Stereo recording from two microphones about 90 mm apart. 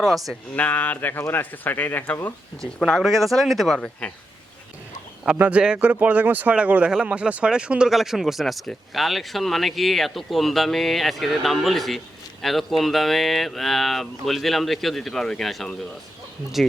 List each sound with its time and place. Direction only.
0.0 s speech: centre (ahead or behind)
0.5 s speech: 15° left (ahead or behind)
2.9 s speech: centre (ahead or behind)
3.8 s speech: 10° left (ahead or behind)
5.4 s speech: 15° right (ahead or behind); by 15.9 s centre (ahead or behind)